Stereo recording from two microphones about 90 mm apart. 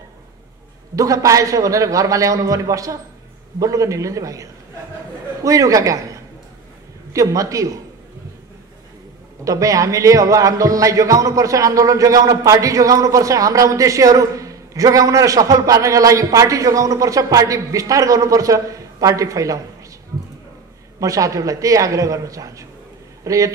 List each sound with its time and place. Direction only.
0.9 s a man's voice: 40° right (ahead or behind)
9.4 s a man's voice: 40° right (ahead or behind)
21.0 s a man's voice: 40° right (ahead or behind)